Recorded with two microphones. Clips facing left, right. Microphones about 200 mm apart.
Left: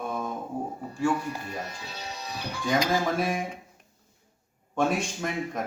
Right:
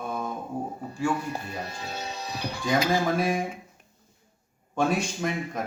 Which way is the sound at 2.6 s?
Centre (ahead or behind).